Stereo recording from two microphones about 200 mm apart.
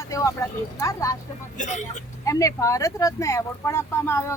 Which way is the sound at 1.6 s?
40° left (ahead or behind).